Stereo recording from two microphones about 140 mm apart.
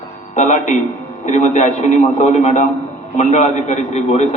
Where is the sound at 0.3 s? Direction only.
60° left (ahead or behind).